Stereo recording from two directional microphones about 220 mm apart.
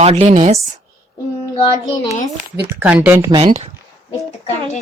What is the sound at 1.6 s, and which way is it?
Child singing, 20° left (ahead or behind).